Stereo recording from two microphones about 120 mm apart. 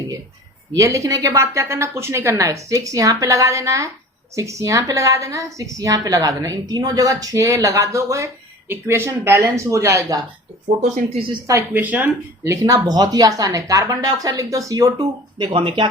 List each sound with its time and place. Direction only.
0.7 s a woman's voice: 25° right (ahead or behind)
11.7 s speech: 15° right (ahead or behind)
12.5 s speech: 30° right (ahead or behind)
15.5 s speech: 45° right (ahead or behind)